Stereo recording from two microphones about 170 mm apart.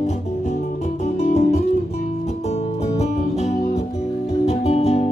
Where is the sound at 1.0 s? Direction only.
40° left (ahead or behind).